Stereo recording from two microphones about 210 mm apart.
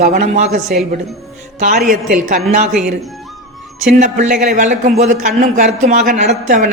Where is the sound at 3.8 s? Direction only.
40° right (ahead or behind).